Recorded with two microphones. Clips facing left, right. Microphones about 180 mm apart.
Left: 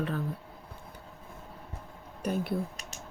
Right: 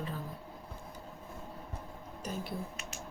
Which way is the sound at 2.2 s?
60° left (ahead or behind).